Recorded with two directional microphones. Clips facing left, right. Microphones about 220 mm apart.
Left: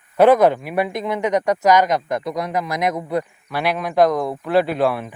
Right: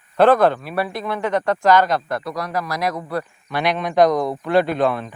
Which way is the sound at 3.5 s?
5° left (ahead or behind).